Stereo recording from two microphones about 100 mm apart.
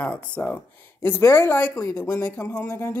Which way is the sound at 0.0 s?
10° left (ahead or behind).